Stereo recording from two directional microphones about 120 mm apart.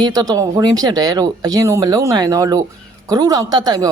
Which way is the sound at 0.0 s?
30° right (ahead or behind).